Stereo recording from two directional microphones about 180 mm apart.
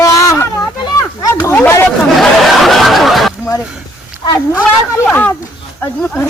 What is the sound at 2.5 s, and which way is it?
Speech, centre (ahead or behind).